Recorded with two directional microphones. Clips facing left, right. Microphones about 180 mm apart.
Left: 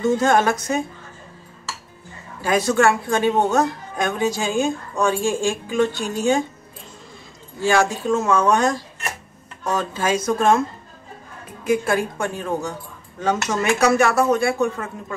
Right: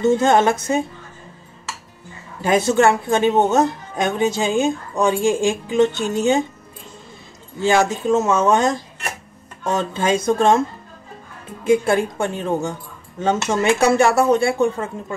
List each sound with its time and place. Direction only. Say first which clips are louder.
0.0 s speech: right 2 dB; 25° right (ahead or behind)
2.4 s speech: right 2 dB; 25° right (ahead or behind)
7.6 s speech: right 2 dB; 20° right (ahead or behind)
11.6 s speech: right 4 dB; 25° right (ahead or behind)